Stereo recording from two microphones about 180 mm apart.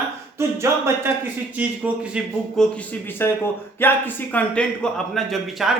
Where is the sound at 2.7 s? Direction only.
10° left (ahead or behind).